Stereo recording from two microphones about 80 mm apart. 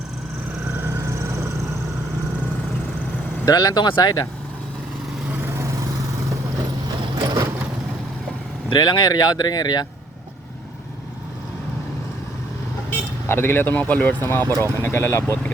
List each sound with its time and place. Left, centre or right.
0.6 s vehicle: right
3.4 s speech: left
3.8 s speech: left
5.4 s vehicle: right
6.8 s a sound: right
8.7 s speech: left
12.9 s speech: left